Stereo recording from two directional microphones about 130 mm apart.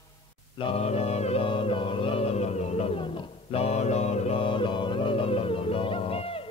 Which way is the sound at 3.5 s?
55° left (ahead or behind).